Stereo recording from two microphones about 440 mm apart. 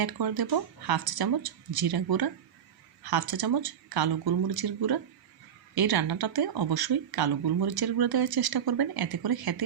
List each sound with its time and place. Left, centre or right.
0.0 s speech: right